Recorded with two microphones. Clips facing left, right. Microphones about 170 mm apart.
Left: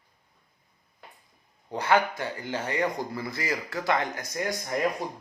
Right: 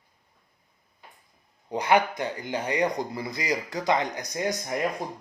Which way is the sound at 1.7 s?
15° right (ahead or behind).